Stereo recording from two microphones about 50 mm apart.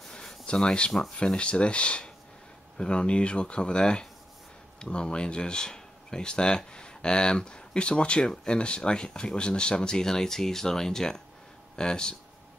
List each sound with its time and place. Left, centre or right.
0.1 s a sound: centre
0.9 s speech: centre
1.4 s speech: left